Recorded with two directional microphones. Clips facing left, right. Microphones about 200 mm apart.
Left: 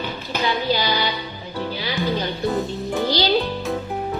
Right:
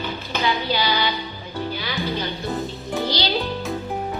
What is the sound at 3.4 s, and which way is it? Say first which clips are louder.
Music: left 2 dB; centre (ahead or behind).